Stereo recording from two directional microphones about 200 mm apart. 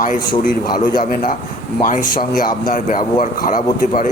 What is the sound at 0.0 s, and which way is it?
Speech, 40° left (ahead or behind).